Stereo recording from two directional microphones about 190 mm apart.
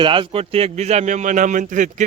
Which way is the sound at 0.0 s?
25° right (ahead or behind).